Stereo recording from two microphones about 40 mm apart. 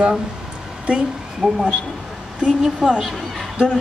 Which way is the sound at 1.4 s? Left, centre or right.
Centre.